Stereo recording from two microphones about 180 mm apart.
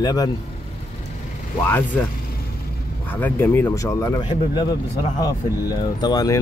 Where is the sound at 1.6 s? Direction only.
10° left (ahead or behind).